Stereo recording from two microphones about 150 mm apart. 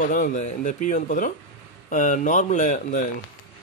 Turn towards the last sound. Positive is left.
turn(degrees=55)  # may be behind; listen again after turning